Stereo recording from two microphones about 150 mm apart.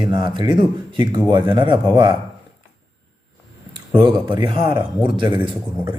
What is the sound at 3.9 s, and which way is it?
Speech, 30° right (ahead or behind).